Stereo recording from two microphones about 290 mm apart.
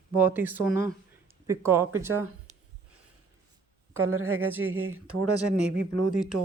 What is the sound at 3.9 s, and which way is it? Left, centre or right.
Speech, right.